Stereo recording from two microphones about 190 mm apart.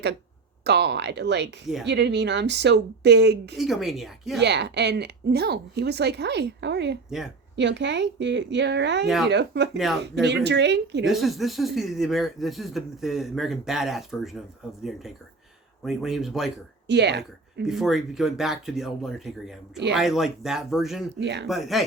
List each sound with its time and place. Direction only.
0.6 s a woman's voice: 60° right (ahead or behind)
3.6 s speech: centre (ahead or behind)
4.4 s a woman's voice: 65° right (ahead or behind)
9.0 s speech: centre (ahead or behind)
9.3 s a woman's voice: 65° right (ahead or behind)
9.7 s speech: centre (ahead or behind)
10.0 s a woman's voice: 65° right (ahead or behind)
11.0 s speech: centre (ahead or behind)
15.8 s speech: centre (ahead or behind)
16.8 s speech: 65° right (ahead or behind)
17.6 s speech: centre (ahead or behind)
21.2 s speech: 65° right (ahead or behind)
21.4 s speech: centre (ahead or behind)